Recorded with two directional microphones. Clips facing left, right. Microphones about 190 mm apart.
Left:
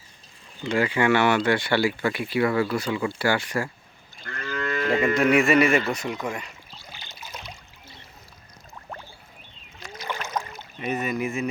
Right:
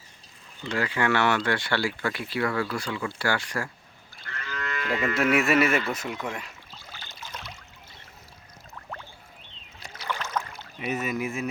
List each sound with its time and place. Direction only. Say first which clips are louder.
0.6 s speech: left 5 dB; 15° left (ahead or behind)
4.6 s moo: left 6 dB; 30° left (ahead or behind)
5.1 s a man's voice: left 2 dB; 5° right (ahead or behind)
6.8 s a sound: even; 15° left (ahead or behind)
8.7 s a sound: left 1 dB; 15° left (ahead or behind)
9.9 s boat: left 1 dB; 15° left (ahead or behind)
10.8 s a man's voice: left 2 dB; 5° right (ahead or behind)